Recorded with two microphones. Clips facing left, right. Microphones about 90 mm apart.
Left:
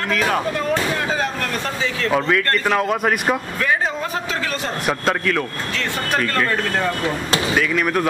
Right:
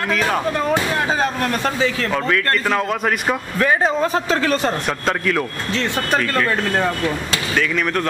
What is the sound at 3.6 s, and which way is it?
A man's voice, 35° right (ahead or behind).